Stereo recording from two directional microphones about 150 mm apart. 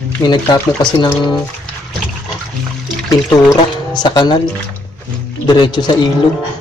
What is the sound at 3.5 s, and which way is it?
Speech, 30° left (ahead or behind).